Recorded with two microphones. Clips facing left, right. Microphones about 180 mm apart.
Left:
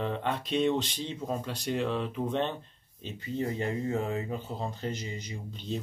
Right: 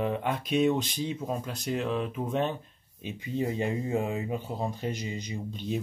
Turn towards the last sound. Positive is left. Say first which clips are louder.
# right 4 dB
turn(degrees=-15)  # may be behind; listen again after turning